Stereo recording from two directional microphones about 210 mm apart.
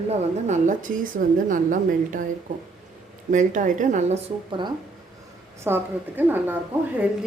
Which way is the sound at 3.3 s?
35° right (ahead or behind).